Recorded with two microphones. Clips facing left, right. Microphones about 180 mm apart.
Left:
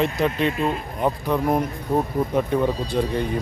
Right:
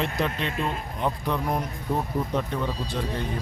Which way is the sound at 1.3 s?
50° left (ahead or behind).